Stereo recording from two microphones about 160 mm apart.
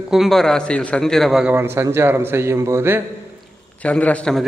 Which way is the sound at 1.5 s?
15° right (ahead or behind).